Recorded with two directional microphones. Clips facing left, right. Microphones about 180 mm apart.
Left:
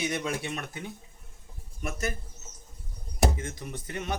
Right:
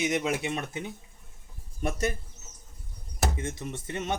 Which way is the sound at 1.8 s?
35° right (ahead or behind).